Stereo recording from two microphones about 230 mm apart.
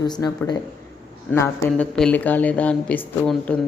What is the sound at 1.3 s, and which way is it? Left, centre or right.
Speech, centre.